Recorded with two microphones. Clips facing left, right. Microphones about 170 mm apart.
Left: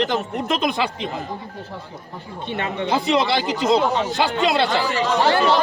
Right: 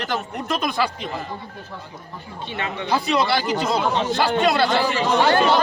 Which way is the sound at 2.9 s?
20° left (ahead or behind).